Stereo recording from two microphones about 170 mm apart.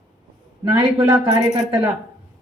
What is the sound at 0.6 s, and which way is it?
Speech, 20° right (ahead or behind).